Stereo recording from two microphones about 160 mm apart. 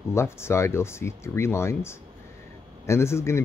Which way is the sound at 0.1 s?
15° left (ahead or behind).